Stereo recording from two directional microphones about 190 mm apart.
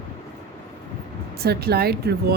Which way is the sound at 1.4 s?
55° right (ahead or behind).